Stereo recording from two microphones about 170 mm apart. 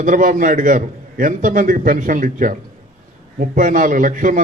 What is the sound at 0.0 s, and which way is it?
A man's voice, 50° right (ahead or behind).